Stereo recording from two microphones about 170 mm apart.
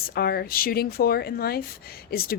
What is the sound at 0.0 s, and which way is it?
A woman's voice, 65° left (ahead or behind).